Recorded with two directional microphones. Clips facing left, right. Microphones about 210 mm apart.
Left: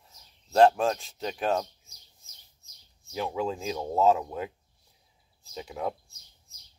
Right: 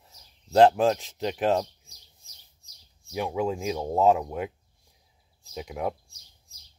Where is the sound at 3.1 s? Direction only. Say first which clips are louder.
Right 3 dB; 15° right (ahead or behind).